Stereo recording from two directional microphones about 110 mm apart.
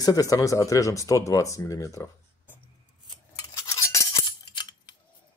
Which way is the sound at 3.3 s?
30° left (ahead or behind).